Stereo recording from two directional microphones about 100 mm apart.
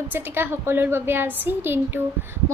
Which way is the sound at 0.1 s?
20° right (ahead or behind).